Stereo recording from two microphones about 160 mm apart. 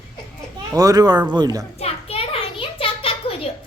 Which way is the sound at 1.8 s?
35° left (ahead or behind).